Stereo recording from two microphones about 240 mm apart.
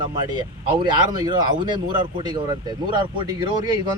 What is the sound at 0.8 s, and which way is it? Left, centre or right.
A man's voice, centre.